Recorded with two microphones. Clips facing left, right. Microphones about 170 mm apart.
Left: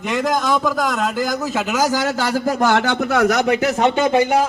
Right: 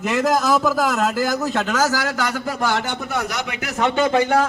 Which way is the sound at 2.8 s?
80° left.